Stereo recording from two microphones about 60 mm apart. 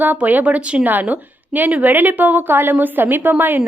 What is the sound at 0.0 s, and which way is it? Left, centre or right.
Speech, right.